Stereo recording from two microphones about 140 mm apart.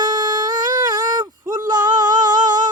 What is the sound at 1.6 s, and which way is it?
Female singing, 30° right (ahead or behind).